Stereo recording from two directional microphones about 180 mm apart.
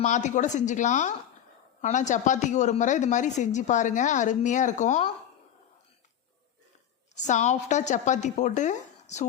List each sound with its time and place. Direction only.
0.0 s a woman's voice: 40° left (ahead or behind)
7.2 s a woman's voice: 40° left (ahead or behind)